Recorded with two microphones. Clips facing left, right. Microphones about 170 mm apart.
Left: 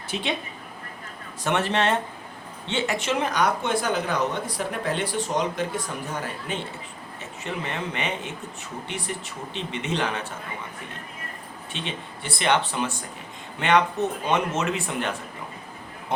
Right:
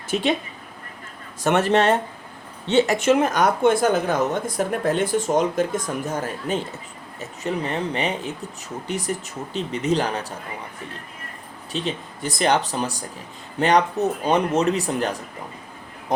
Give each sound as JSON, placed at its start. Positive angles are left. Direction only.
{"t": 0.1, "sound": "a woman's voice", "side_deg": -45}
{"t": 1.5, "sound": "speech", "side_deg": -45}
{"t": 11.7, "sound": "speech", "side_deg": -40}